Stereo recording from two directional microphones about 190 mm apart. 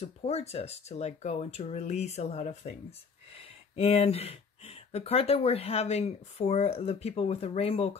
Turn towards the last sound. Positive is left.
turn(degrees=30)  # may be behind; listen again after turning